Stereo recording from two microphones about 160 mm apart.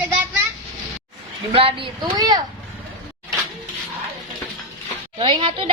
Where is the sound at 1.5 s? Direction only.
35° right (ahead or behind).